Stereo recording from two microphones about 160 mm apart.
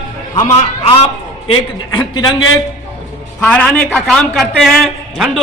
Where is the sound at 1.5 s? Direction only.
30° left (ahead or behind).